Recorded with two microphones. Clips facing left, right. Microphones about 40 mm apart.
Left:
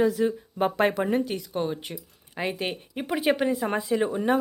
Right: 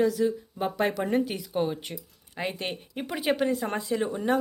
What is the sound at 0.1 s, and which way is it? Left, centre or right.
Speech, left.